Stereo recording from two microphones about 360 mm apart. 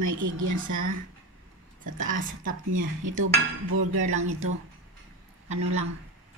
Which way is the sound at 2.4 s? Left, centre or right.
Right.